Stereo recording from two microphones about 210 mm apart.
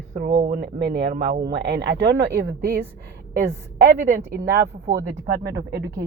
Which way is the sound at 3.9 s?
45° right (ahead or behind).